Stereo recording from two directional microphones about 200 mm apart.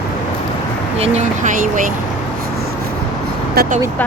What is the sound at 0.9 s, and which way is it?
Speech, 35° right (ahead or behind).